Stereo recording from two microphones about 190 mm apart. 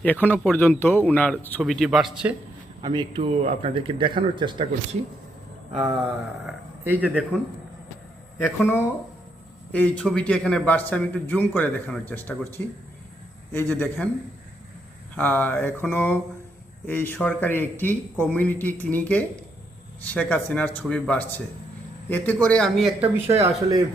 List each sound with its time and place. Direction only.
0.0 s a man's voice: 10° left (ahead or behind)
2.8 s speech: 25° right (ahead or behind)
6.4 s speech: 10° right (ahead or behind)
8.4 s a man's voice: 10° left (ahead or behind)
15.1 s a man's voice: 10° left (ahead or behind); by 23.5 s 10° right (ahead or behind)